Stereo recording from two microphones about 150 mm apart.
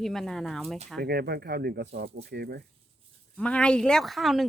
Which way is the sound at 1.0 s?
90° right.